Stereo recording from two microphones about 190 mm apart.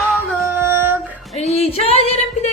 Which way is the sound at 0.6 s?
10° right (ahead or behind).